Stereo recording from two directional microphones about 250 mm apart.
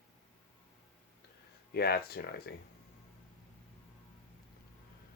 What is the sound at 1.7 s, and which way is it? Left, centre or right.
Speech, left.